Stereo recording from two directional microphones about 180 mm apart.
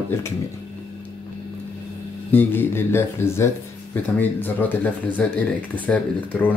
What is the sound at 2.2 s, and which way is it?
Speech, 10° left (ahead or behind).